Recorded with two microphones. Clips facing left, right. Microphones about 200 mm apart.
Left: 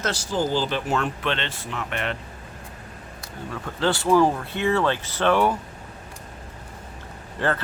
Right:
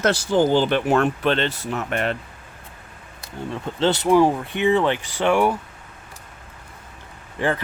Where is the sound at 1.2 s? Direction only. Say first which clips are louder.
Right 6 dB; 40° right (ahead or behind).